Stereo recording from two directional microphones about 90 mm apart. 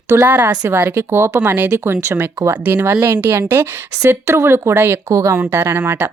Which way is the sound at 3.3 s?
25° right (ahead or behind).